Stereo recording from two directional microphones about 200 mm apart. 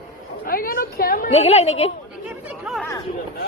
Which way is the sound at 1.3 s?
30° left (ahead or behind).